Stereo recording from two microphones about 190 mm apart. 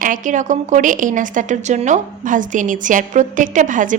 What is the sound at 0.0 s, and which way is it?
Speech, 45° right (ahead or behind).